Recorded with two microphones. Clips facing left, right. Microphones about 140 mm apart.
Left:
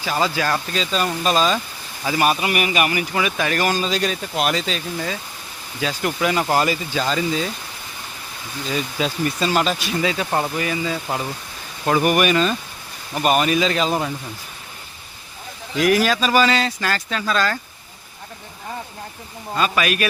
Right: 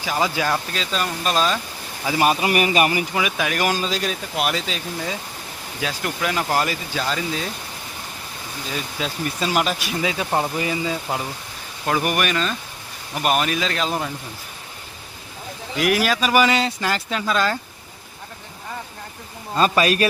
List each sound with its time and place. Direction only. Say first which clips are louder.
0.0 s speech: left 1 dB; 10° right (ahead or behind)
0.7 s speech: left 3 dB; centre (ahead or behind)
2.1 s a man's voice: right 1 dB; 25° right (ahead or behind)
3.2 s speech: left 4 dB; 10° right (ahead or behind)
8.7 s speech: left 5 dB; centre (ahead or behind); by 11.2 s 15° right (ahead or behind)
11.9 s speech: left 4 dB; 5° left (ahead or behind)
15.7 s speech: left 3 dB; 5° right (ahead or behind)
19.5 s speech: right 3 dB; 35° right (ahead or behind)